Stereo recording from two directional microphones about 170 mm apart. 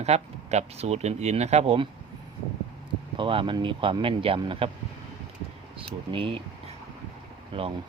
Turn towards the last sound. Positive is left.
turn(degrees=-30)  # may be behind; listen again after turning